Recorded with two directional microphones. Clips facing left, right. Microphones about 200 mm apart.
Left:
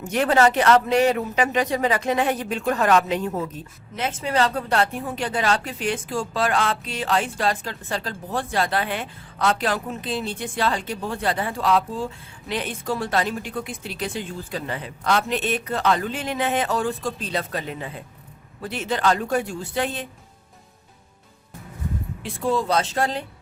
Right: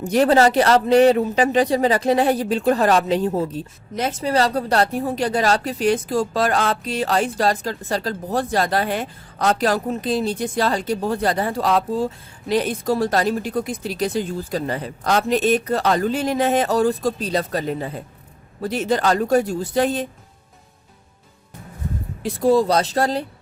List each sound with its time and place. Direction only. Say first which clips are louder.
0.0 s speech: right 4 dB; 35° right (ahead or behind)
22.2 s speech: right 8 dB; 40° right (ahead or behind)